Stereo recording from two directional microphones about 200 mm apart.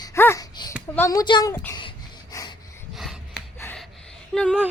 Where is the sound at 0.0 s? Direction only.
15° left (ahead or behind).